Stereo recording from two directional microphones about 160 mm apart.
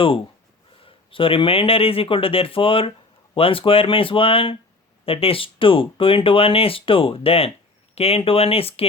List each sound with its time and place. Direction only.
0.8 s speech: 35° left (ahead or behind)